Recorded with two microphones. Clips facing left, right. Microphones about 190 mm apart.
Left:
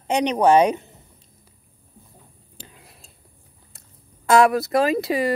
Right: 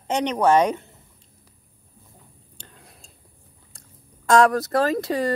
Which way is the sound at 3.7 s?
5° left (ahead or behind).